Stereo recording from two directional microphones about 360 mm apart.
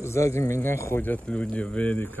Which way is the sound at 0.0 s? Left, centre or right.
Centre.